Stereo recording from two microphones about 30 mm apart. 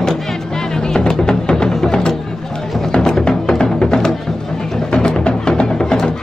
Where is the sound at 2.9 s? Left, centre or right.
Centre.